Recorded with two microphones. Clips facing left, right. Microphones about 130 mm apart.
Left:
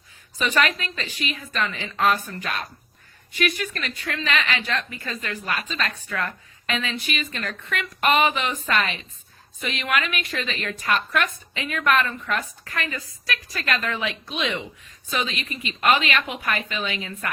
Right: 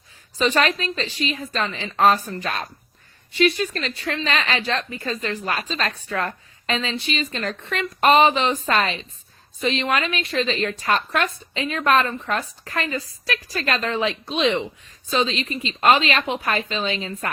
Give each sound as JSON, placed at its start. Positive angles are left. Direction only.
{"t": 0.3, "sound": "a woman's voice", "side_deg": -35}